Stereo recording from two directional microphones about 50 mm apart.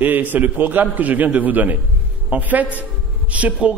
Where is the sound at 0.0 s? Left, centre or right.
Right.